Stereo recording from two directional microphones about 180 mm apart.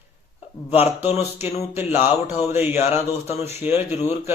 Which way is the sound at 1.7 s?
10° right (ahead or behind).